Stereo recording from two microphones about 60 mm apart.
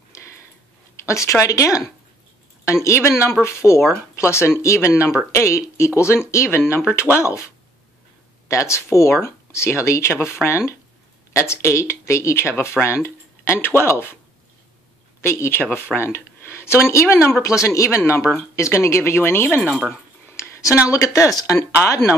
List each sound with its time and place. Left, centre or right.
0.1 s a sound: left
1.0 s speech: left
2.6 s speech: left
8.5 s speech: left
15.2 s speech: left
17.4 s speech: left
19.9 s speech: left